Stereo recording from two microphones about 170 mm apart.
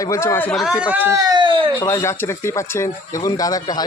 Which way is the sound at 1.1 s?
25° right (ahead or behind).